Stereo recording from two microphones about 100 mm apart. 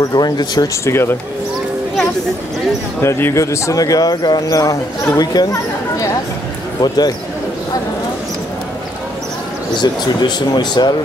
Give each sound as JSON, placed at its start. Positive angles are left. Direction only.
{"t": 0.0, "sound": "speech", "side_deg": 40}
{"t": 0.8, "sound": "speech", "side_deg": 25}
{"t": 3.0, "sound": "speech", "side_deg": 25}
{"t": 9.8, "sound": "speech", "side_deg": 45}